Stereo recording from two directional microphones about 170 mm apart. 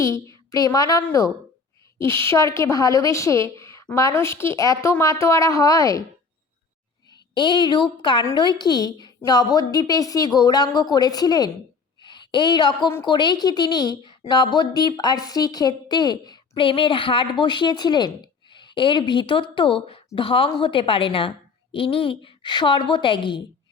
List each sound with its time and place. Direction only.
0.0 s a woman's voice: 15° left (ahead or behind)
7.3 s a woman's voice: 25° left (ahead or behind)